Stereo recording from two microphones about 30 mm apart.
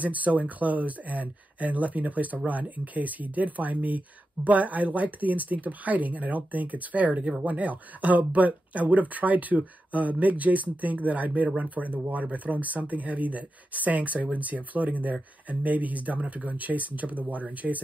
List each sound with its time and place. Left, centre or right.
0.0 s speech: right